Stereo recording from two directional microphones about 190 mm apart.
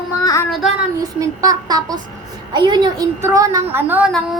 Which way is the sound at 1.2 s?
20° right (ahead or behind).